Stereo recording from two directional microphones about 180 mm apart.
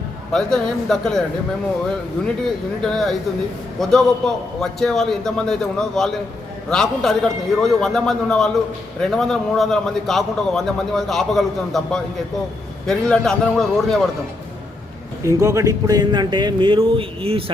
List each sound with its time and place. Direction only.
0.3 s a man's voice: 5° left (ahead or behind)
2.8 s a man's voice: centre (ahead or behind)
15.2 s speech: 15° right (ahead or behind)